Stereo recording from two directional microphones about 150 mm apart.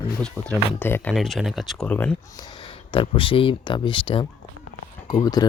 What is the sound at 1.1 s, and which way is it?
Speech, centre (ahead or behind).